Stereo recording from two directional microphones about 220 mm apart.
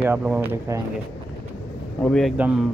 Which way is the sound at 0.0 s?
5° right (ahead or behind).